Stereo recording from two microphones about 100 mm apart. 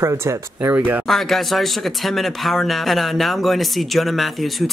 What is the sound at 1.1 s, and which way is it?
Speech, centre (ahead or behind).